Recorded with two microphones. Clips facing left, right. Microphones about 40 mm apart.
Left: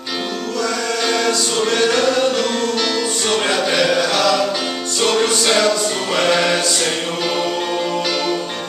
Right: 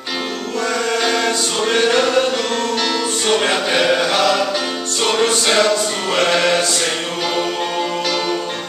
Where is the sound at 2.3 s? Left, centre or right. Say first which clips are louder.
Even; centre.